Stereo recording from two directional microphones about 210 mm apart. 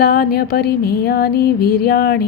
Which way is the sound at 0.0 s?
45° left (ahead or behind).